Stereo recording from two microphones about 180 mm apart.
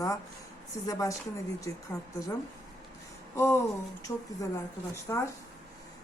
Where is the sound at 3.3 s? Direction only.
15° left (ahead or behind).